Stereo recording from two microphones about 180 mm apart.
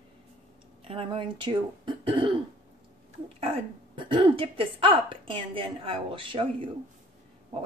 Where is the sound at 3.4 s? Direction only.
30° right (ahead or behind).